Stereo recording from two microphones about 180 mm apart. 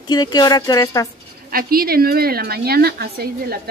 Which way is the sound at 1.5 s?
55° right (ahead or behind).